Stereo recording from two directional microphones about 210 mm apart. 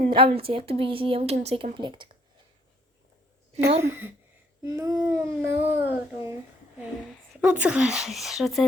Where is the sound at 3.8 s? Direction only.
10° right (ahead or behind).